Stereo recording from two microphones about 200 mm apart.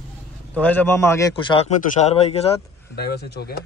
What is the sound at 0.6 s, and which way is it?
A man's voice, 5° left (ahead or behind).